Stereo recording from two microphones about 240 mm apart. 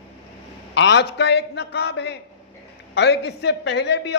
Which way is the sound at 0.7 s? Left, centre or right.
Left.